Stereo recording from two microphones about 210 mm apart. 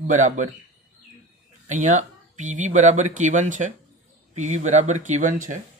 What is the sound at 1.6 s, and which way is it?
Speech, 35° right (ahead or behind).